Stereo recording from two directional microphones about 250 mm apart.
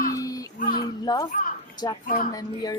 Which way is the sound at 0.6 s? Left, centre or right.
Left.